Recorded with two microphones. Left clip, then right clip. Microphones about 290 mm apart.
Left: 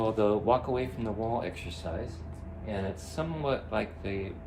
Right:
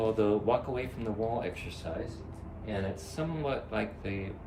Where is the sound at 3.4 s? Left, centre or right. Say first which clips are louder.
Left 3 dB; centre.